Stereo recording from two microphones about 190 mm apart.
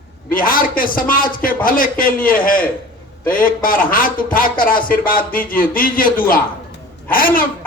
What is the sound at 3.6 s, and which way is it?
Speech, 50° left (ahead or behind).